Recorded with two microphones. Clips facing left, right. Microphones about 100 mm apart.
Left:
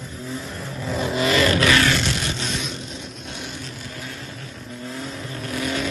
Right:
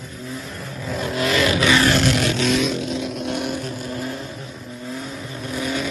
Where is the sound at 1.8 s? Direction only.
60° right (ahead or behind).